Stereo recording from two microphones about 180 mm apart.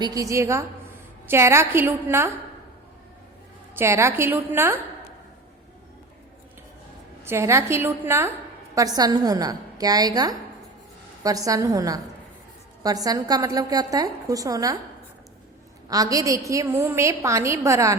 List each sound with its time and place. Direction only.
0.0 s a woman's voice: 20° right (ahead or behind)
3.8 s a woman's voice: 15° right (ahead or behind)
7.3 s a woman's voice: 15° right (ahead or behind)
15.9 s a woman's voice: 20° right (ahead or behind)